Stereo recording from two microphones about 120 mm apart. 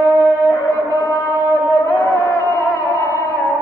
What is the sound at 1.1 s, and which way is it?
Music, 25° left (ahead or behind).